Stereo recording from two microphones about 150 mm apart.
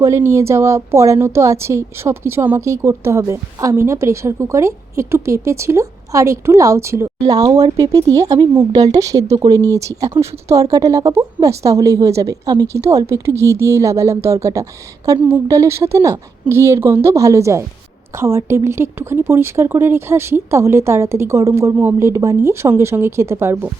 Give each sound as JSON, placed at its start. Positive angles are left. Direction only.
{"t": 0.0, "sound": "speech", "side_deg": -20}